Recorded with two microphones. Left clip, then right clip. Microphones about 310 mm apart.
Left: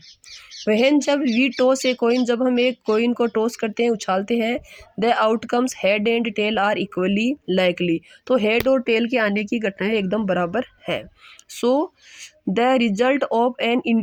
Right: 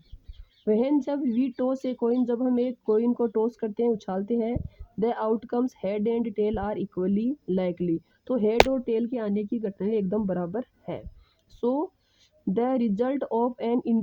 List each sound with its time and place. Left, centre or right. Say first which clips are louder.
0.6 s speech: left 7 dB; right
3.1 s speech: left 5 dB; right
3.3 s speech: left 5 dB; right
11.6 s speech: left 8 dB; right
12.2 s speech: left 7 dB; right
13.2 s speech: left 7 dB; right
13.6 s speech: left 6 dB; right